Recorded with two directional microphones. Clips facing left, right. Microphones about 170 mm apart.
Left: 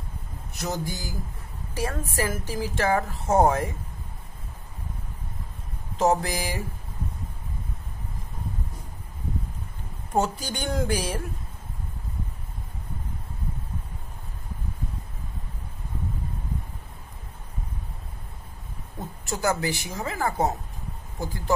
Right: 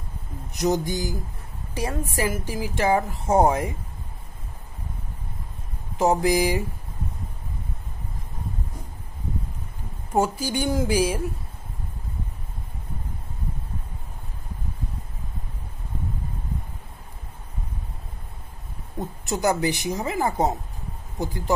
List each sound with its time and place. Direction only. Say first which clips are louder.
0.5 s a sound: right 8 dB; 20° right (ahead or behind)
1.8 s a woman's voice: right 2 dB; 15° right (ahead or behind)
5.9 s a woman's voice: right 3 dB; 15° right (ahead or behind)
10.1 s a woman's voice: right 3 dB; 10° right (ahead or behind)
18.9 s a woman's voice: right 4 dB; 20° right (ahead or behind)